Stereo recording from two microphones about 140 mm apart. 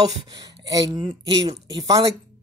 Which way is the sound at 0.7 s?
30° right (ahead or behind).